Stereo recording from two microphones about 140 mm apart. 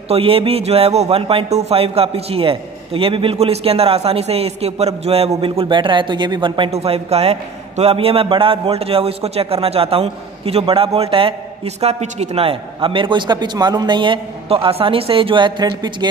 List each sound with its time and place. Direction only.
0.1 s a man's voice: 45° right (ahead or behind)
6.7 s a man's voice: 50° right (ahead or behind); by 16.1 s 30° right (ahead or behind)